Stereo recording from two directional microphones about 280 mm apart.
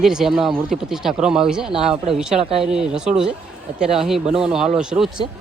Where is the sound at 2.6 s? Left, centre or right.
Centre.